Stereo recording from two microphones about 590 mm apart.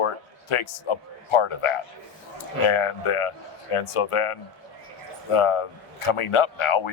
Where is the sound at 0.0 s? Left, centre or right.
Left.